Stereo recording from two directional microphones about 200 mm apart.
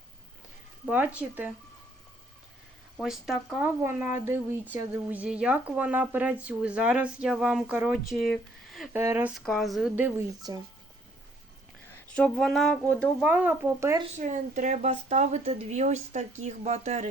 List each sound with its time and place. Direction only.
0.9 s speech: 10° right (ahead or behind)
3.0 s speech: centre (ahead or behind)
8.9 s speech: 10° right (ahead or behind)
9.3 s speech: centre (ahead or behind)
9.9 s speech: 10° right (ahead or behind)
12.1 s speech: 5° left (ahead or behind)
13.2 s speech: 10° right (ahead or behind)
14.2 s a woman's voice: 40° right (ahead or behind)